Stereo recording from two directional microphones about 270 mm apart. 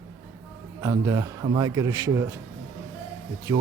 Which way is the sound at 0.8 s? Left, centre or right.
Centre.